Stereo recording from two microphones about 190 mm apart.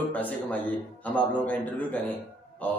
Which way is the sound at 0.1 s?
10° left (ahead or behind).